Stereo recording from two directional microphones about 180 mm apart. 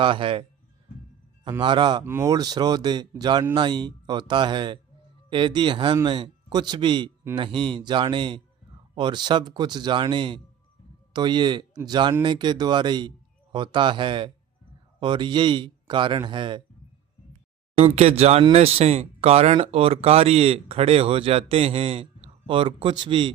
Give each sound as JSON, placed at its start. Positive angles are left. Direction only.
{"t": 0.0, "sound": "a man's voice", "side_deg": -30}
{"t": 1.5, "sound": "a man's voice", "side_deg": -25}
{"t": 17.7, "sound": "speech", "side_deg": -35}